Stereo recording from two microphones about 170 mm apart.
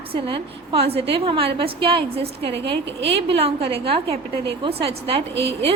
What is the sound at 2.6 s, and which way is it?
Speech, 90° right.